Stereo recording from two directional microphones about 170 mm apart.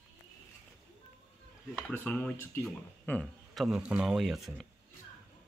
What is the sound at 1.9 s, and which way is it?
Speech, 10° left (ahead or behind).